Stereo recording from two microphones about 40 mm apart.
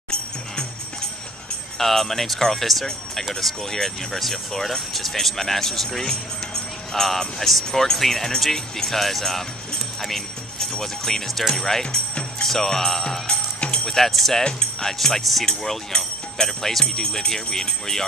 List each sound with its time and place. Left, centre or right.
1.8 s speech: centre
16.4 s jingle bell: centre
16.8 s speech: centre